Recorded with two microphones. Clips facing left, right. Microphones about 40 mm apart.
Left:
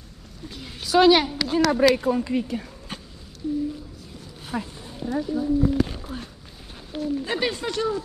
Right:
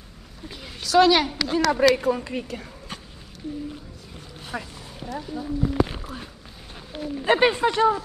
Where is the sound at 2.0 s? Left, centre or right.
Right.